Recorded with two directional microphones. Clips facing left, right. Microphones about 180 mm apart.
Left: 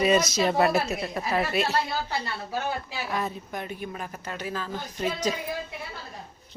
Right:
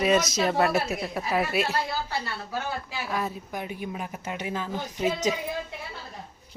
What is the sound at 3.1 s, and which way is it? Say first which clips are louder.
A woman's voice: even; 5° right (ahead or behind).